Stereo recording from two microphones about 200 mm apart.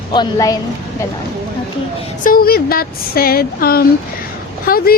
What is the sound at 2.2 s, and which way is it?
A woman's voice, 50° left (ahead or behind).